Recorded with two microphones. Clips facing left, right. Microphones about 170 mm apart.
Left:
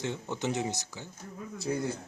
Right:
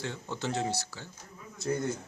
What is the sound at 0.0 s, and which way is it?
Speech, 20° left (ahead or behind).